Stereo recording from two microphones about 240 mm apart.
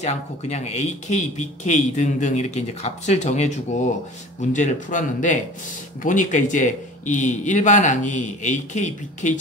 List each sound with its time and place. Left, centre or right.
0.0 s a man's voice: left